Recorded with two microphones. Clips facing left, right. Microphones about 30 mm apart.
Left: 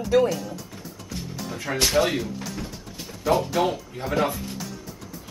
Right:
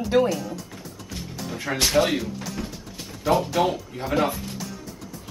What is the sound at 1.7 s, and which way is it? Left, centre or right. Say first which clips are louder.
Speech: right 1 dB; centre.